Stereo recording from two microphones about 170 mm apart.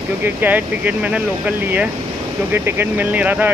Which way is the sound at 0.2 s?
10° right (ahead or behind).